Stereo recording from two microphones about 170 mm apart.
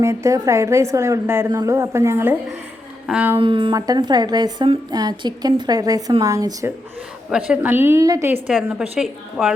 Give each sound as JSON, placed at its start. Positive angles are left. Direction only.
{"t": 0.0, "sound": "a woman's voice", "side_deg": -15}
{"t": 3.4, "sound": "speech", "side_deg": -30}
{"t": 7.3, "sound": "a woman's voice", "side_deg": -5}
{"t": 8.4, "sound": "a woman's voice", "side_deg": 0}